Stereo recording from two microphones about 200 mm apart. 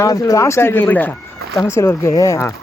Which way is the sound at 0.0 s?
15° left (ahead or behind).